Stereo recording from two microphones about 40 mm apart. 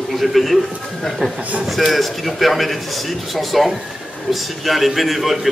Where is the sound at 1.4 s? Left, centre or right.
Right.